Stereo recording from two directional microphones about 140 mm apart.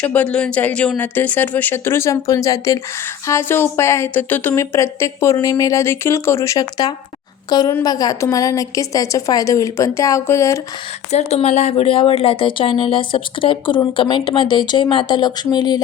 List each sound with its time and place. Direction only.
0.0 s a woman's voice: 10° left (ahead or behind)
11.1 s speech: 50° left (ahead or behind); by 15.8 s 30° left (ahead or behind)